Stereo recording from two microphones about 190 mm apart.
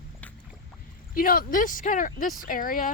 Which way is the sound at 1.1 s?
50° left (ahead or behind).